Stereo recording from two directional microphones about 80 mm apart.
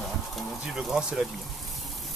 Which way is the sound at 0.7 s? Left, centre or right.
Centre.